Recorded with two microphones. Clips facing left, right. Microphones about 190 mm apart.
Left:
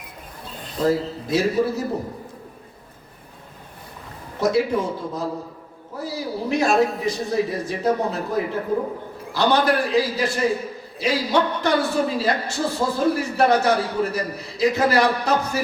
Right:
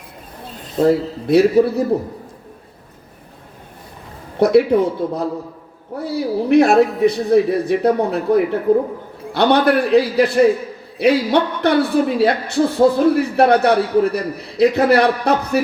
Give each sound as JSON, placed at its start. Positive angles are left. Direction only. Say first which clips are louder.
{"t": 0.8, "sound": "a woman's voice", "louder": "right 6 dB", "side_deg": -60}
{"t": 4.4, "sound": "a woman's voice", "louder": "right 8 dB", "side_deg": -60}